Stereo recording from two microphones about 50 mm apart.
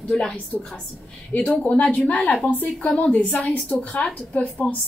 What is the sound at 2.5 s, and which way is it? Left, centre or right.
Speech, left.